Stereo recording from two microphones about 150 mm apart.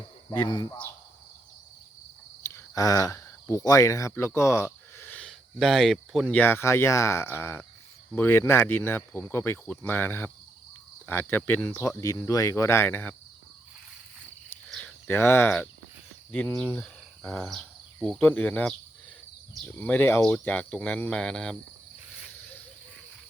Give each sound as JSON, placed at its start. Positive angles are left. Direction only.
{"t": 0.3, "sound": "speech", "side_deg": 30}
{"t": 2.4, "sound": "a sound", "side_deg": 15}
{"t": 5.3, "sound": "speech", "side_deg": 0}
{"t": 6.3, "sound": "speech", "side_deg": 15}
{"t": 14.7, "sound": "speech", "side_deg": 10}
{"t": 17.2, "sound": "speech", "side_deg": 5}
{"t": 19.8, "sound": "speech", "side_deg": 10}